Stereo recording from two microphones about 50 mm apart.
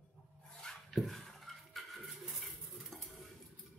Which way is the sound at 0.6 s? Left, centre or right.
Centre.